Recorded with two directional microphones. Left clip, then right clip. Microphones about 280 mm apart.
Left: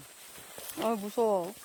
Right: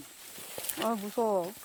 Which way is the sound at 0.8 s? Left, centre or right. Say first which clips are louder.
Left 1 dB; centre.